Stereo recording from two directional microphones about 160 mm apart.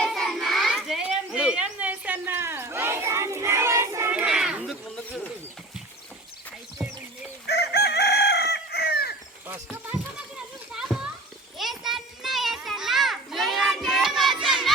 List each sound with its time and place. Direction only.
0.0 s a sound: centre (ahead or behind)
7.4 s chicken: 90° left
9.7 s children playing: 10° right (ahead or behind)